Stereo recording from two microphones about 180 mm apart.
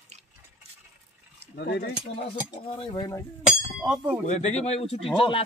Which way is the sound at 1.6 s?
70° left (ahead or behind).